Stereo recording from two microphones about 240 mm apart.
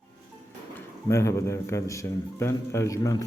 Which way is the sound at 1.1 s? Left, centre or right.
Centre.